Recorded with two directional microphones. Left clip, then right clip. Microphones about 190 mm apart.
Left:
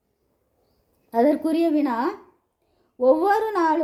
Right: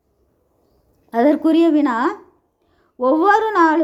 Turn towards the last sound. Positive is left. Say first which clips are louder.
# right 6 dB
turn(degrees=-20)  # may be behind; listen again after turning